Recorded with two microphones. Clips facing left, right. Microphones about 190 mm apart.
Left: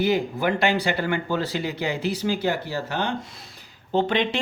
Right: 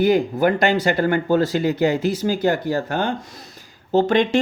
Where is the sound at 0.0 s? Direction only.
50° right (ahead or behind).